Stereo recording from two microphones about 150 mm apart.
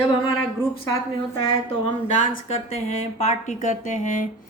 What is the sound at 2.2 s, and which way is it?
Speech, 55° left (ahead or behind).